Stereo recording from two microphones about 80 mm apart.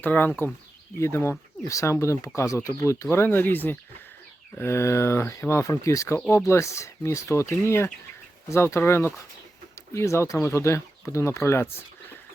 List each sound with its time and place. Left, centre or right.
0.0 s speech: left
0.9 s speech: left